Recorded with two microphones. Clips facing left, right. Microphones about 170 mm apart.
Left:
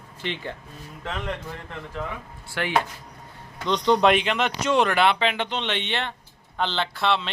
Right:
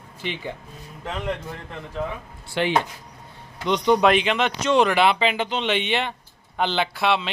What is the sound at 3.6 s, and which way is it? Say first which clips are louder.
Speech: right 1 dB; 10° right (ahead or behind).